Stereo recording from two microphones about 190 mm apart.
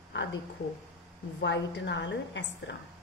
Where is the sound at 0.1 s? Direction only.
75° left (ahead or behind).